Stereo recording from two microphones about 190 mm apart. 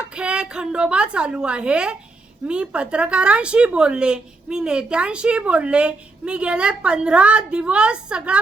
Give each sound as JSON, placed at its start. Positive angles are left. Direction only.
{"t": 0.0, "sound": "a woman's voice", "side_deg": -5}